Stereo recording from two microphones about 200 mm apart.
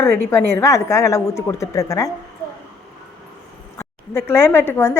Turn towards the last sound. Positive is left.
turn(degrees=10)  # may be behind; listen again after turning